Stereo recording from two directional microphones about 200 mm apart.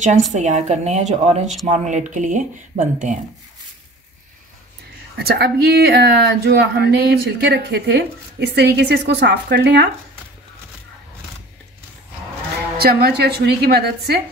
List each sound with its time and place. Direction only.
0.0 s a woman's voice: 35° right (ahead or behind)
5.1 s speech: 55° right (ahead or behind)
12.7 s a woman's voice: 50° right (ahead or behind)